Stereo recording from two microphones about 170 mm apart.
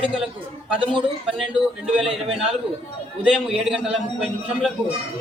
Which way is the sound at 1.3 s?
5° right (ahead or behind).